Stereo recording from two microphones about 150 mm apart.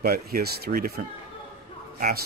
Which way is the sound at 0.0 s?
80° right.